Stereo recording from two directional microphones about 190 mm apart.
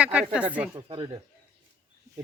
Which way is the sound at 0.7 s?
25° right (ahead or behind).